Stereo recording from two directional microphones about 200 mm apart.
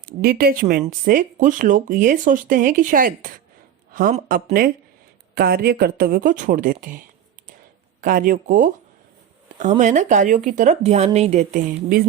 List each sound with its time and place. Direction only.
0.0 s speech: 50° right (ahead or behind)
8.0 s speech: 45° right (ahead or behind)